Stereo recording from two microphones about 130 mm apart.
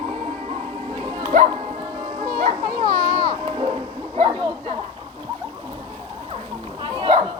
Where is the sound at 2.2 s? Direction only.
40° right (ahead or behind).